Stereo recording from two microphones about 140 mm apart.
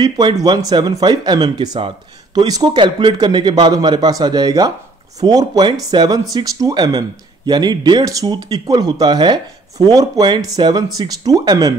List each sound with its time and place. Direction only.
0.0 s speech: 30° right (ahead or behind)